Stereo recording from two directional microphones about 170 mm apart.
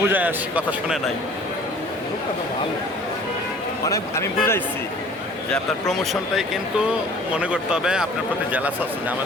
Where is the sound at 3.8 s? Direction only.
15° left (ahead or behind).